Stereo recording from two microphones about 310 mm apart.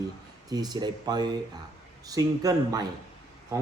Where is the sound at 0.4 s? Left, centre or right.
Centre.